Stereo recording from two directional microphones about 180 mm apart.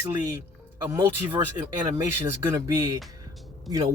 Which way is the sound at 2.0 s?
15° right (ahead or behind).